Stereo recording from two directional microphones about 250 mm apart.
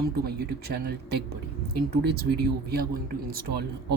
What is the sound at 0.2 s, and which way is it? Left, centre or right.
Speech, right.